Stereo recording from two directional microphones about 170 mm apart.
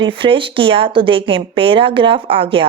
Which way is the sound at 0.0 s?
30° right (ahead or behind).